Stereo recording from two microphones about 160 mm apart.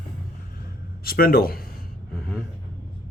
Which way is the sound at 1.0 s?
70° left (ahead or behind).